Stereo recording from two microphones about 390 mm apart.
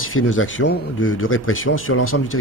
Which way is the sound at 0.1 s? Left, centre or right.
Left.